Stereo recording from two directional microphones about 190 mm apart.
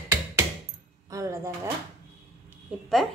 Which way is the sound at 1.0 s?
15° right (ahead or behind).